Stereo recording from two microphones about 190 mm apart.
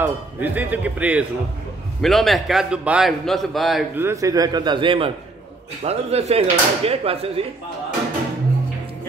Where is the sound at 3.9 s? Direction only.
15° right (ahead or behind); by 7.3 s 30° right (ahead or behind).